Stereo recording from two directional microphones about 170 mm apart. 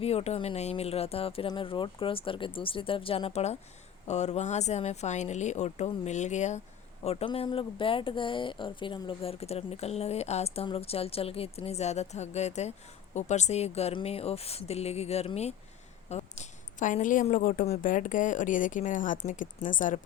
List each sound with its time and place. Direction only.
0.0 s a woman's voice: 35° left (ahead or behind)